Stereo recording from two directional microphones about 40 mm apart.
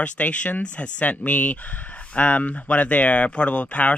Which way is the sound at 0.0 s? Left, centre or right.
Left.